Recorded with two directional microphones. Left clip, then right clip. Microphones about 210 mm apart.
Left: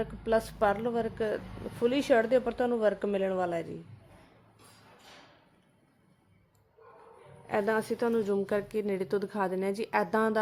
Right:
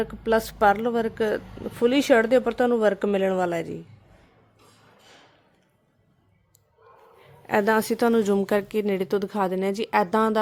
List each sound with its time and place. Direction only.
0.0 s speech: 50° right (ahead or behind)
7.4 s a woman's voice: 55° right (ahead or behind); by 10.3 s 35° right (ahead or behind)